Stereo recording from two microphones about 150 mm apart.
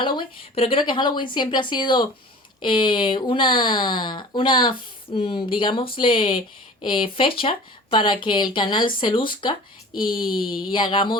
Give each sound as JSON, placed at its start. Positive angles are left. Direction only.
{"t": 0.0, "sound": "speech", "side_deg": 30}